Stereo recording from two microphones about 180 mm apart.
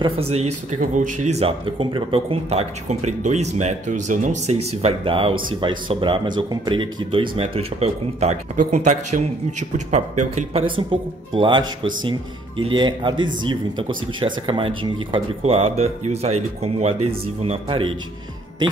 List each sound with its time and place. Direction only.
0.0 s speech: 35° right (ahead or behind)